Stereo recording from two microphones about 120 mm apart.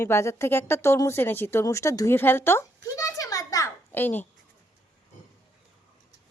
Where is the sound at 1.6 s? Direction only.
25° left (ahead or behind).